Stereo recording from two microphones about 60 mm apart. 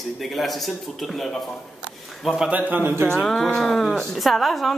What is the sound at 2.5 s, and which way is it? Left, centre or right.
Speech, right.